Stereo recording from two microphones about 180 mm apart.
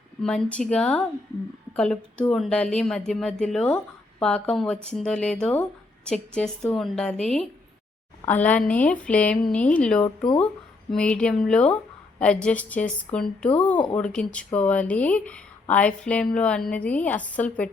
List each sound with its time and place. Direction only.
0.2 s a woman's voice: 5° left (ahead or behind)